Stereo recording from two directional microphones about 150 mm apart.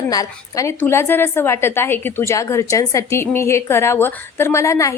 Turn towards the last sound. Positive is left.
turn(degrees=20)  # may be behind; listen again after turning